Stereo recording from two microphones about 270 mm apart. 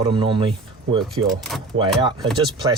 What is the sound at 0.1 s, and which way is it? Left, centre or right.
Speech, centre.